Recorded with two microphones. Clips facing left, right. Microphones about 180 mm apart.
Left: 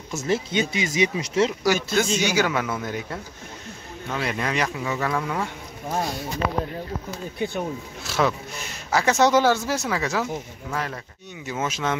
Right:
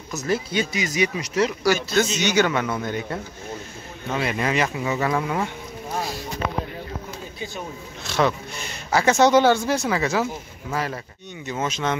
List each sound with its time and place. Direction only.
0.1 s speech: 25° left (ahead or behind)
2.1 s speech: 5° left (ahead or behind)
7.3 s speech: 60° left (ahead or behind)
8.0 s speech: 5° left (ahead or behind)
11.4 s speech: 5° left (ahead or behind)